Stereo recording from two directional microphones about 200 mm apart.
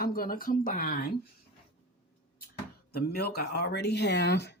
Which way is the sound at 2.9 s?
50° left (ahead or behind).